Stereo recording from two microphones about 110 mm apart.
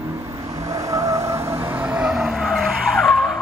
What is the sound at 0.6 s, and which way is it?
Vehicle, 30° right (ahead or behind).